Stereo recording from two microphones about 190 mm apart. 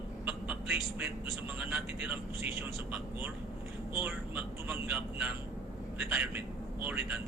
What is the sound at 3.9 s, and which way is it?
Speech, 10° right (ahead or behind).